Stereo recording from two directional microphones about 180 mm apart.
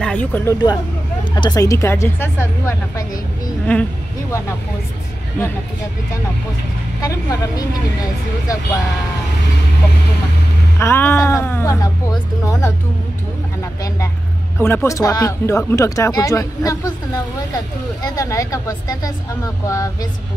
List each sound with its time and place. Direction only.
0.0 s speech: 10° left (ahead or behind)
1.3 s speech: 20° left (ahead or behind)
7.0 s speech: 20° left (ahead or behind)
10.8 s speech: 10° left (ahead or behind)
14.6 s speech: 15° left (ahead or behind)